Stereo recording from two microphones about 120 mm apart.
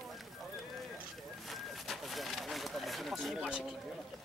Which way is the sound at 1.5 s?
Centre (ahead or behind).